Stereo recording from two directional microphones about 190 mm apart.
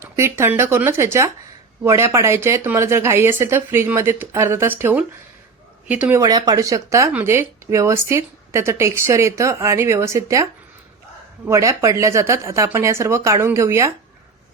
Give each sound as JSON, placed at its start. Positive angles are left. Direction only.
{"t": 0.0, "sound": "speech", "side_deg": -15}